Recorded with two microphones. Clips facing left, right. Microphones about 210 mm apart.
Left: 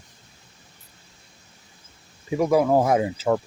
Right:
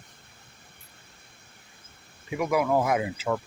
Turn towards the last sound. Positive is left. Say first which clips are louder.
# left 6 dB
turn(degrees=35)  # may be behind; listen again after turning